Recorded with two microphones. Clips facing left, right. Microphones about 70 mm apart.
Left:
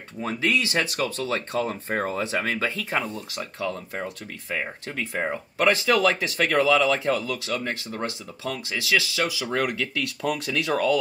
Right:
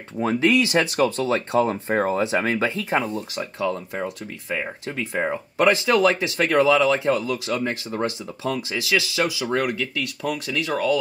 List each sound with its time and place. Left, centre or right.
0.2 s speech: right
4.8 s speech: centre